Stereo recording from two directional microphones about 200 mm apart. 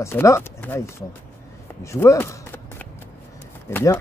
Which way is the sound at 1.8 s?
15° left (ahead or behind).